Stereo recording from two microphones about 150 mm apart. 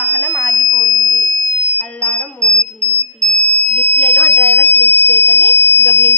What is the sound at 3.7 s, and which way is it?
Fire alarm, 10° left (ahead or behind).